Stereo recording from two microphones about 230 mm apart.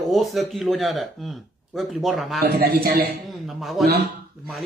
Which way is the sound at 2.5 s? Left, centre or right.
Right.